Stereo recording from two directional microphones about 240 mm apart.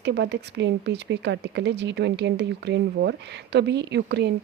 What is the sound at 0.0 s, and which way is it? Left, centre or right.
Speech, right.